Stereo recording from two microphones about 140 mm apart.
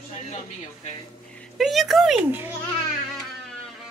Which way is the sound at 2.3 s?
15° right (ahead or behind).